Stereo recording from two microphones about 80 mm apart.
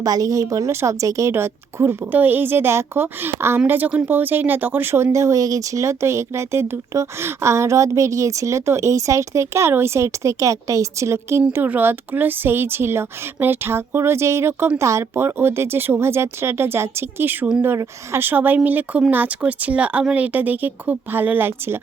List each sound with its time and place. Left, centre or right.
0.0 s a woman's voice: right
11.5 s speech: right